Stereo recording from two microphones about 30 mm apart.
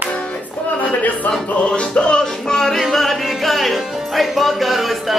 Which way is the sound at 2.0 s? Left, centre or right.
Left.